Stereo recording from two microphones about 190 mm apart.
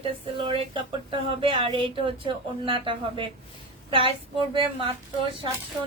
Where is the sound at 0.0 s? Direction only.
30° right (ahead or behind).